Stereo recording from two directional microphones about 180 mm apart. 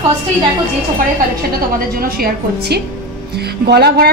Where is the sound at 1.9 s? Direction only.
55° right (ahead or behind).